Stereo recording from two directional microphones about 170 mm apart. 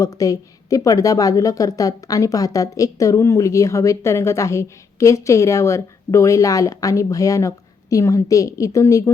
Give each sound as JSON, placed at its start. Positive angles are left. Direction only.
{"t": 0.0, "sound": "a woman's voice", "side_deg": 20}